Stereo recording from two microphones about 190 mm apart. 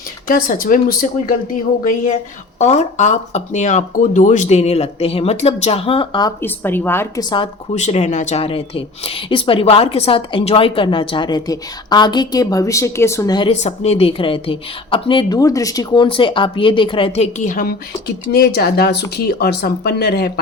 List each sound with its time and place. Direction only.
0.3 s speech: 50° left (ahead or behind); by 6.3 s 25° left (ahead or behind)
6.4 s a woman's voice: 10° left (ahead or behind)
7.8 s speech: 35° left (ahead or behind); by 13.5 s 20° left (ahead or behind)
13.5 s speech: 35° left (ahead or behind); by 20.4 s 55° left (ahead or behind)